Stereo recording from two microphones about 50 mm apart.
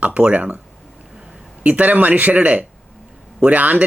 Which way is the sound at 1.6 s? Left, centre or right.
Right.